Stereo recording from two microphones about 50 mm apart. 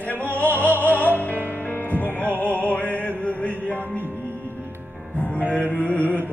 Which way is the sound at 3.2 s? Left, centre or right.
Left.